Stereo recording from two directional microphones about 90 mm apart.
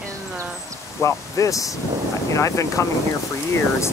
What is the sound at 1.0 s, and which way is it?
Speech, 35° left (ahead or behind).